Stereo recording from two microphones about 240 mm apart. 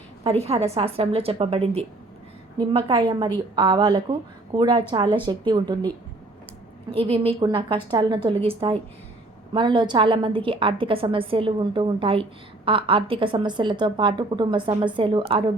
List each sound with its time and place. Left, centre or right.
0.3 s a woman's voice: right
6.9 s a woman's voice: right